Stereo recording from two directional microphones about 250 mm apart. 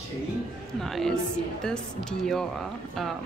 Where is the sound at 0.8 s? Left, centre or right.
Centre.